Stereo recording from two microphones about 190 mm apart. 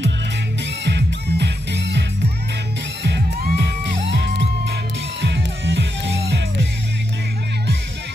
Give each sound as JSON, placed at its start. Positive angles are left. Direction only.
{"t": 0.8, "sound": "music", "side_deg": -65}